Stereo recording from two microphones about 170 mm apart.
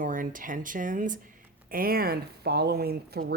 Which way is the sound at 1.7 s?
60° right (ahead or behind).